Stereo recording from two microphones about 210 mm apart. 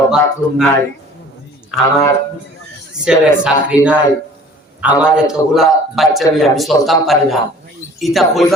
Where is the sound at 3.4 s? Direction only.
5° right (ahead or behind).